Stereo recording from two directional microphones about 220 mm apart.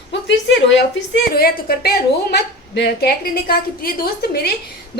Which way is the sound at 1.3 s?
45° left (ahead or behind).